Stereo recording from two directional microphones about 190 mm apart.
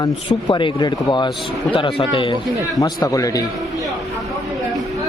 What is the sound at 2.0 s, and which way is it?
A man's voice, 25° left (ahead or behind).